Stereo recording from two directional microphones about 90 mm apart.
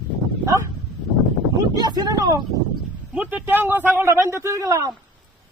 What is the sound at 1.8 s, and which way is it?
Speech, 50° right (ahead or behind).